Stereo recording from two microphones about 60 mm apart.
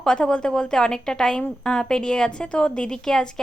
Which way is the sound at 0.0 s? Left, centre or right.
Centre.